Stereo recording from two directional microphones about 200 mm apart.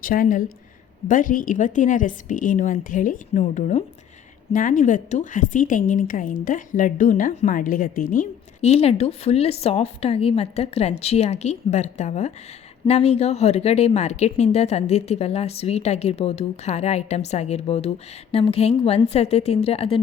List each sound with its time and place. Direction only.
0.0 s speech: 45° left (ahead or behind)